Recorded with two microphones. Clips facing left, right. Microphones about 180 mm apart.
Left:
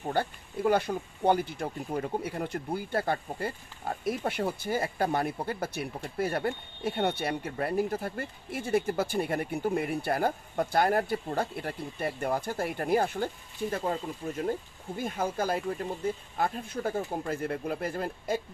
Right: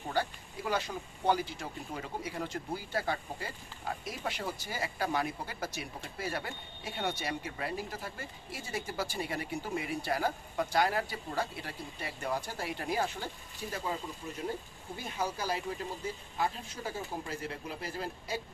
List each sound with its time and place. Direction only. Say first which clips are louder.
0.1 s speech: left 3 dB; 55° left (ahead or behind)